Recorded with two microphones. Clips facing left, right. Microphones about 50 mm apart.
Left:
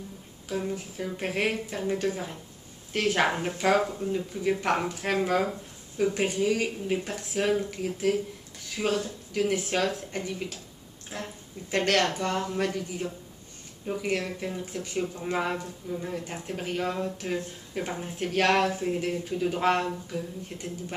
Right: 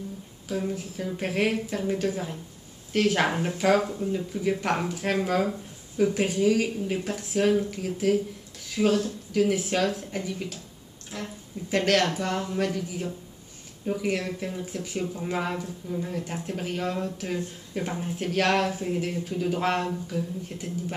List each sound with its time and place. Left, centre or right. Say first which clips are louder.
0.5 s speech: right 1 dB; centre
11.1 s speech: right 1 dB; left
11.7 s speech: right 2 dB; centre